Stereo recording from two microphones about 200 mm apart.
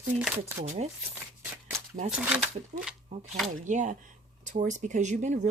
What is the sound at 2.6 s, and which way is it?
Speech, 35° right (ahead or behind).